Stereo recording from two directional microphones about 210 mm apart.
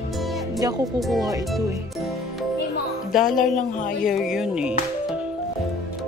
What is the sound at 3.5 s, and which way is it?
Speech, 40° left (ahead or behind).